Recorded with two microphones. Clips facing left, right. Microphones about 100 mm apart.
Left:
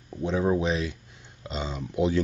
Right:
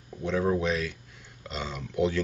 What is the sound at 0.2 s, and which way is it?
Speech, 20° left (ahead or behind).